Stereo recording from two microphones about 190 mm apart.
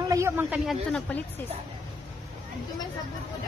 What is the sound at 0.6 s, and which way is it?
Speech, 5° left (ahead or behind).